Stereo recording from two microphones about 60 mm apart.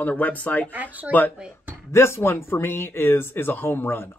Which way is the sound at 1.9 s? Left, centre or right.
Left.